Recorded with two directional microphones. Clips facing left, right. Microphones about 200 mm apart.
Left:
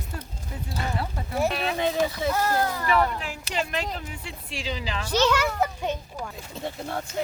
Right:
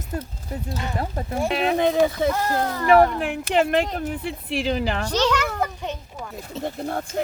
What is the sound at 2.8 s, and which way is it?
Speech, 55° right (ahead or behind).